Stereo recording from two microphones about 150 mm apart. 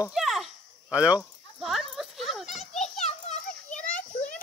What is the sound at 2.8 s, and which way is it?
Children playing, 45° left (ahead or behind).